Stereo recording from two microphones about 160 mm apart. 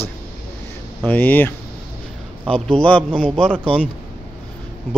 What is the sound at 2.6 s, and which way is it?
Speech, 5° left (ahead or behind).